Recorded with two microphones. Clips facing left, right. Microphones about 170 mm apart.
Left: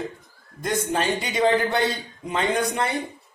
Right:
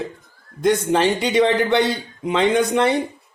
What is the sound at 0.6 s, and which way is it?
A man's voice, 80° right.